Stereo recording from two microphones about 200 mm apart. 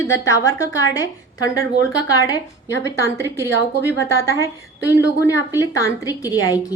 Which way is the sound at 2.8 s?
15° left (ahead or behind).